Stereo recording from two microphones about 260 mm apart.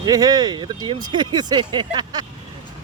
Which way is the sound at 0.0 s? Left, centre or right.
Centre.